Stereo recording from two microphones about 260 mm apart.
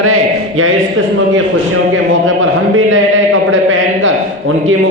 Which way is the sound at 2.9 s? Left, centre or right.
Right.